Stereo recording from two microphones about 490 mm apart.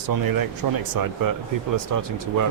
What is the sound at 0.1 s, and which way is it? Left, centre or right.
Speech, right.